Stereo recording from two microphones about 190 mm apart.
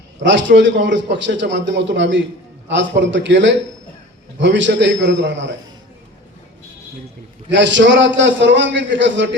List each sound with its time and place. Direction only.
0.2 s a man's voice: 70° right (ahead or behind)
7.5 s a man's voice: 70° right (ahead or behind)